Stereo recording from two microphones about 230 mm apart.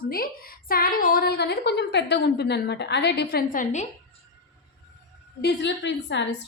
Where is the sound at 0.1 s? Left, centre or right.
Left.